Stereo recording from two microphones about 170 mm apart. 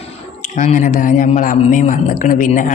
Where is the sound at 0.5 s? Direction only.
50° left (ahead or behind).